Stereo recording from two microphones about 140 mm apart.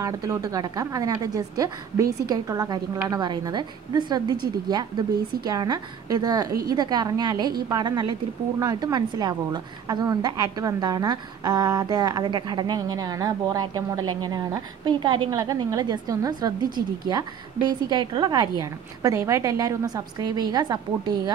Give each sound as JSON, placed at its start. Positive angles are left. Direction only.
{"t": 0.0, "sound": "a woman's voice", "side_deg": -25}
{"t": 16.6, "sound": "a woman's voice", "side_deg": -90}
{"t": 17.1, "sound": "a woman's voice", "side_deg": -30}